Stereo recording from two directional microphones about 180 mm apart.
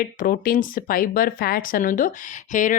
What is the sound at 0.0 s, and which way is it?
Speech, 50° left (ahead or behind).